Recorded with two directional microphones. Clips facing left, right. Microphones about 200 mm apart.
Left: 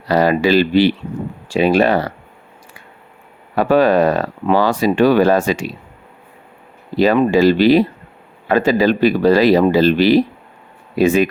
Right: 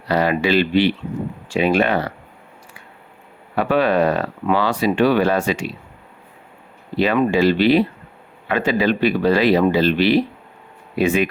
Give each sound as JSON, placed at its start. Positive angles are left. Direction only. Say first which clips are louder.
{"t": 0.1, "sound": "speech", "louder": "left 4 dB", "side_deg": 40}
{"t": 3.5, "sound": "speech", "louder": "left 4 dB", "side_deg": 40}
{"t": 6.9, "sound": "speech", "louder": "left 4 dB", "side_deg": 40}